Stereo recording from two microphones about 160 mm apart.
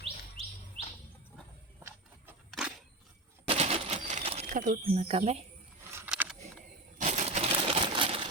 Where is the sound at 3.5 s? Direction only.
35° right (ahead or behind).